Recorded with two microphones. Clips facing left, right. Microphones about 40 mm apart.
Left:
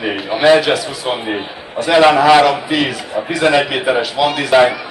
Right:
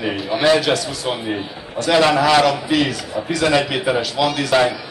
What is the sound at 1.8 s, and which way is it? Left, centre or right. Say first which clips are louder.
A man's voice: left 5 dB; centre.